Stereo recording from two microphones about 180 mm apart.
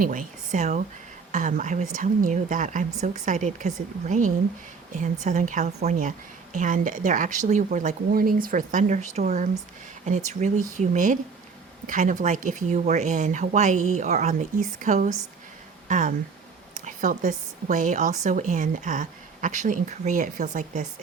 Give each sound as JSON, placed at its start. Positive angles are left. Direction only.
{"t": 0.0, "sound": "a woman's voice", "side_deg": -45}